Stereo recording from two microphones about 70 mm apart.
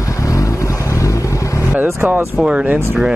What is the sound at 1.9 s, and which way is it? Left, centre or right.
Speech, right.